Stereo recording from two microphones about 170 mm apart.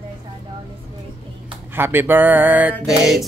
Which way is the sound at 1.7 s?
10° right (ahead or behind).